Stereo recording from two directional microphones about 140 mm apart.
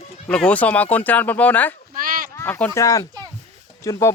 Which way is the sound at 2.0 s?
90° right.